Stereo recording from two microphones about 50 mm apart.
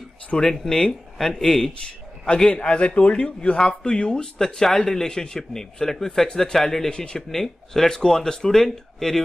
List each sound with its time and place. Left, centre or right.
0.4 s speech: centre
1.9 s a sound: centre
2.5 s speech: left